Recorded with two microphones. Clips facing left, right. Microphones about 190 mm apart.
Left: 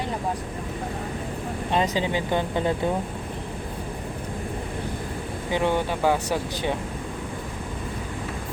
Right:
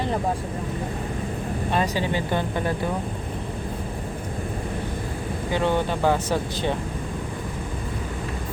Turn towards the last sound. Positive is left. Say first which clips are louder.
# right 1 dB
turn(degrees=15)  # may be behind; listen again after turning